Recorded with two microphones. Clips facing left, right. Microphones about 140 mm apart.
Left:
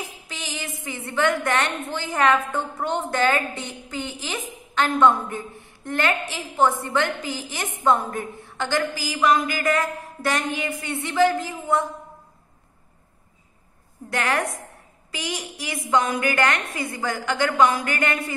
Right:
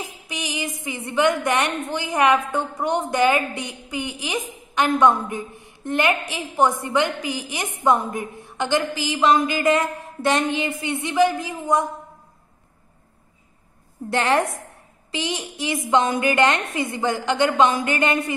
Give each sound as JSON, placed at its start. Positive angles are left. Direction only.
{"t": 0.3, "sound": "a woman's voice", "side_deg": -15}
{"t": 14.1, "sound": "a woman's voice", "side_deg": -25}